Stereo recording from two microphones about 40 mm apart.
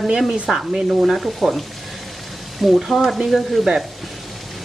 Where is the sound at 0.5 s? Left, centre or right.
Centre.